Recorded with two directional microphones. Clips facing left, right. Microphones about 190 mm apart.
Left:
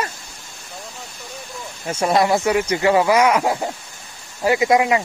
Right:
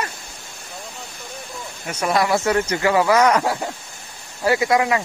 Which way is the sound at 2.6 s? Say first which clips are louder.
Left 1 dB; 15° left (ahead or behind).